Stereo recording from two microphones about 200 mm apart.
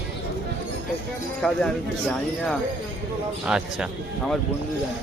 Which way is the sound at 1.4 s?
5° left (ahead or behind).